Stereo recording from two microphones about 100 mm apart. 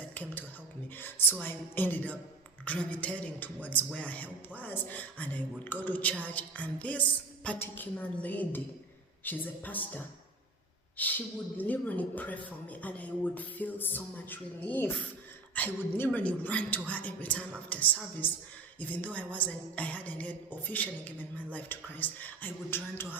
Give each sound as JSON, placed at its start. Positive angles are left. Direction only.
{"t": 0.1, "sound": "a sound", "side_deg": 15}
{"t": 0.9, "sound": "a woman's voice", "side_deg": 20}
{"t": 11.0, "sound": "a woman's voice", "side_deg": 15}